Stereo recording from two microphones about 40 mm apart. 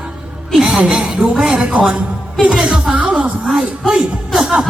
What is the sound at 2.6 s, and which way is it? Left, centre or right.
Speech, centre.